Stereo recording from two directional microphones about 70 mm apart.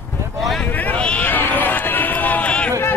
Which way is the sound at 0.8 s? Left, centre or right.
Centre.